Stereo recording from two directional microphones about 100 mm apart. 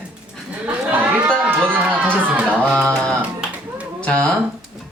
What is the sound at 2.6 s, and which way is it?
Speech, 10° left (ahead or behind).